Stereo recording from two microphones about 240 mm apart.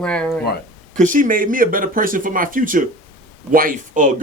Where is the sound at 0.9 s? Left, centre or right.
Right.